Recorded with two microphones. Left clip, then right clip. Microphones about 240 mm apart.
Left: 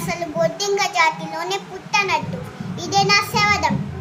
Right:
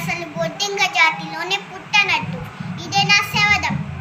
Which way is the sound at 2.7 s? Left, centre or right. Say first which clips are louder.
Right 1 dB; centre.